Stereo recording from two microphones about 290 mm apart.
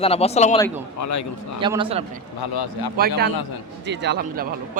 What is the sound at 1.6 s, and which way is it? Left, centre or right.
Speech, centre.